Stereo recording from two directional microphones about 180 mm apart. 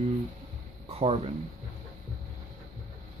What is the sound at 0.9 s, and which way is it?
Speech, 35° right (ahead or behind).